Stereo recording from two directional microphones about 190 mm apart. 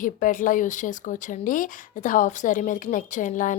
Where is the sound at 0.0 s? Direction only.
45° left (ahead or behind).